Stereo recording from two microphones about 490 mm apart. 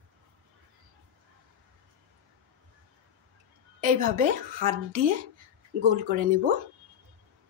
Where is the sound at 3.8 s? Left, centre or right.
Centre.